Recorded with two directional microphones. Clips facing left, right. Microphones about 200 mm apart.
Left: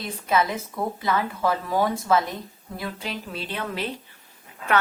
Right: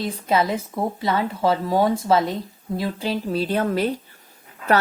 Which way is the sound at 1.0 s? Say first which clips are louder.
Right 3 dB; 25° right (ahead or behind).